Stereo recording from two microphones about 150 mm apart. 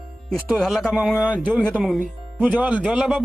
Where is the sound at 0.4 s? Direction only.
Centre (ahead or behind).